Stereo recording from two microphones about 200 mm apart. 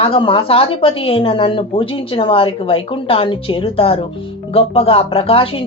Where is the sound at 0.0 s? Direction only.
25° left (ahead or behind).